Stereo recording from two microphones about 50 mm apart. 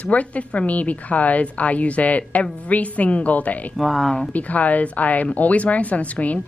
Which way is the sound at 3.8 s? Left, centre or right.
Centre.